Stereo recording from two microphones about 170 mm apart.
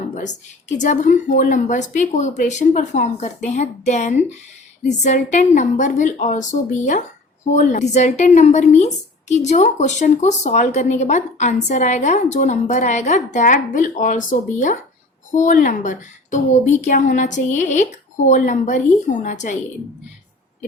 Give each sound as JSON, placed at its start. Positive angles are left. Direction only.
{"t": 0.8, "sound": "speech", "side_deg": 45}